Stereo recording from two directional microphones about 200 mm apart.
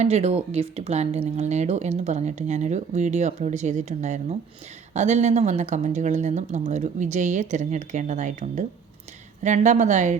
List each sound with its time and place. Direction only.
0.0 s speech: 30° right (ahead or behind)